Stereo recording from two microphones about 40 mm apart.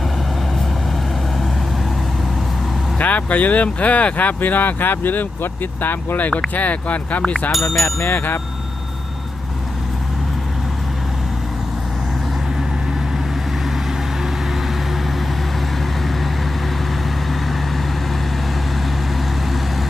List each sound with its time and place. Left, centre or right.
3.0 s speech: left
7.9 s speech: left